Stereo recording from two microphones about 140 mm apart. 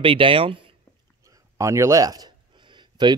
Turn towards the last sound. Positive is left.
turn(degrees=-30)  # may be behind; listen again after turning